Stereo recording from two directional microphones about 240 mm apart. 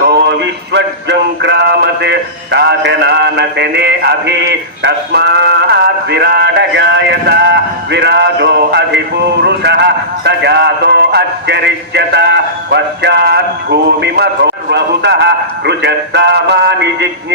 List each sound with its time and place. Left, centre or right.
0.1 s speech: right